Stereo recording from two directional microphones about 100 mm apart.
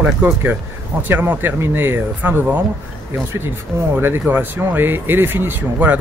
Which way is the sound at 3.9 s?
20° right (ahead or behind).